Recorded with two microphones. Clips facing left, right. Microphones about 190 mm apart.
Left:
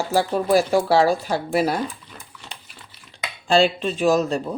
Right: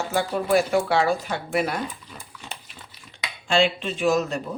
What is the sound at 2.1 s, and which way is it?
Dog, 10° right (ahead or behind).